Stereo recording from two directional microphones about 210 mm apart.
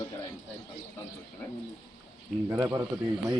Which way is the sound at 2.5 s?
15° right (ahead or behind).